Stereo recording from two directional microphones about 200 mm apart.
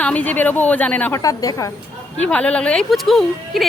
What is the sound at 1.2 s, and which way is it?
Speech, 20° left (ahead or behind).